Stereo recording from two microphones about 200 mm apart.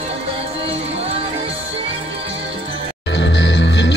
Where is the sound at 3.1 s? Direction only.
60° left (ahead or behind).